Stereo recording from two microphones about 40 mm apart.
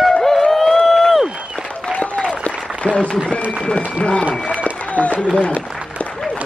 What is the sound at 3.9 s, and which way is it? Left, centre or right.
Applause, left.